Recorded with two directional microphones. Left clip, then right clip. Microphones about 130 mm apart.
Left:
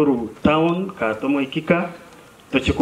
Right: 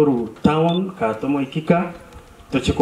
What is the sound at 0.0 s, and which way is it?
A man's voice, 35° left (ahead or behind).